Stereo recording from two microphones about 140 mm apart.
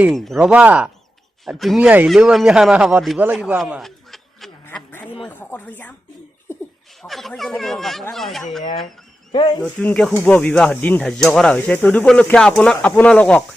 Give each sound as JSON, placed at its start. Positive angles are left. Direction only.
{"t": 0.1, "sound": "speech", "side_deg": 0}
{"t": 0.3, "sound": "speech", "side_deg": -10}
{"t": 1.5, "sound": "speech", "side_deg": 0}
{"t": 3.3, "sound": "a sound", "side_deg": -5}
{"t": 4.7, "sound": "a sound", "side_deg": 15}
{"t": 5.2, "sound": "speech", "side_deg": 15}
{"t": 7.0, "sound": "speech", "side_deg": 0}
{"t": 9.3, "sound": "speech", "side_deg": 35}
{"t": 9.6, "sound": "speech", "side_deg": 10}